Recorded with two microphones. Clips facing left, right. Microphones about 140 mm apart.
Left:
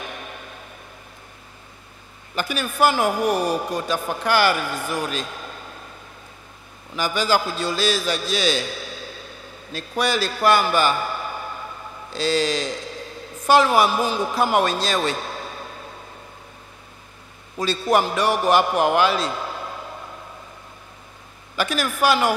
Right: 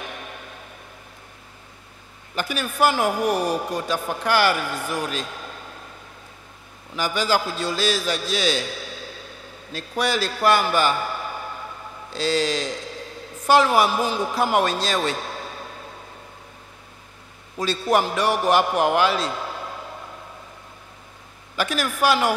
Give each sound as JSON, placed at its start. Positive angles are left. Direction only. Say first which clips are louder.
{"t": 0.0, "sound": "a sound", "louder": "left 1 dB", "side_deg": 20}
{"t": 2.3, "sound": "a man's voice", "louder": "left 1 dB", "side_deg": 20}
{"t": 7.0, "sound": "a man's voice", "louder": "left 1 dB", "side_deg": 20}
{"t": 9.7, "sound": "a sound", "louder": "left 1 dB", "side_deg": 20}
{"t": 13.5, "sound": "a man's voice", "louder": "left 1 dB", "side_deg": 20}
{"t": 17.6, "sound": "a man's voice", "louder": "left 1 dB", "side_deg": 20}
{"t": 21.5, "sound": "a man's voice", "louder": "left 1 dB", "side_deg": 20}